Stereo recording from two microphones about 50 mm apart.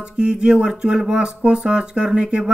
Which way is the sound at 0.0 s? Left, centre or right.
Centre.